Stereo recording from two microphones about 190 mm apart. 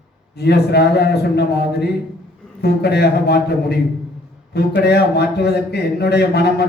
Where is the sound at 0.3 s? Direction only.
60° left (ahead or behind).